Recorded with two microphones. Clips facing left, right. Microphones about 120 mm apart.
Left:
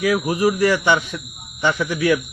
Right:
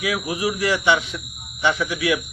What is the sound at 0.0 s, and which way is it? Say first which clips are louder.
Speech: left 6 dB; 45° left (ahead or behind).